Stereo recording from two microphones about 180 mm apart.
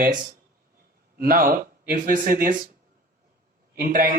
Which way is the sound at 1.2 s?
55° right (ahead or behind).